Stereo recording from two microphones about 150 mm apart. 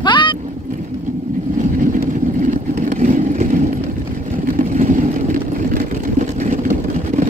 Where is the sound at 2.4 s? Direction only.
55° right (ahead or behind).